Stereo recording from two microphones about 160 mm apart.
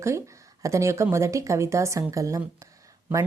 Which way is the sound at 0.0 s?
20° right (ahead or behind).